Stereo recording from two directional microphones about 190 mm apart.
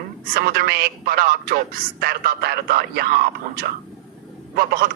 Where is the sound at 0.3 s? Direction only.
55° right (ahead or behind).